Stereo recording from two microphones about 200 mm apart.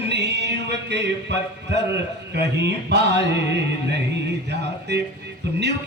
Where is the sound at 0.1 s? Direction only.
60° right (ahead or behind).